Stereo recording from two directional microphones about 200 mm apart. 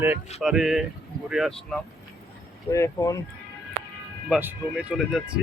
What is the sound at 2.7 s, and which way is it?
Speech, 15° left (ahead or behind).